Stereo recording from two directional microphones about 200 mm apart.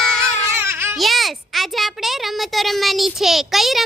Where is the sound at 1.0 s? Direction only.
Centre (ahead or behind).